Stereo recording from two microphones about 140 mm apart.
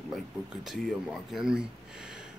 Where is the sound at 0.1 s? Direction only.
Centre (ahead or behind).